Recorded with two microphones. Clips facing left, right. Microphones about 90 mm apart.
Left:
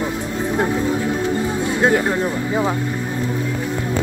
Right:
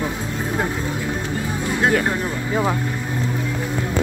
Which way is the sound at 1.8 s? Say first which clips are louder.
Left 2 dB; 20° left (ahead or behind).